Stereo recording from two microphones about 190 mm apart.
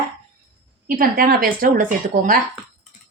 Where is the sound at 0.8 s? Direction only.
50° right (ahead or behind).